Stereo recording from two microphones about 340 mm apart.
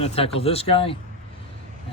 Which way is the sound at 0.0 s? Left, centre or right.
Centre.